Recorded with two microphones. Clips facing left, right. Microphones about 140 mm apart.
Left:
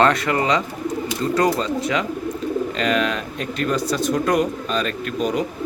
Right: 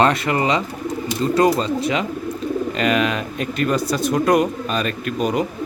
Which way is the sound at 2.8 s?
10° right (ahead or behind).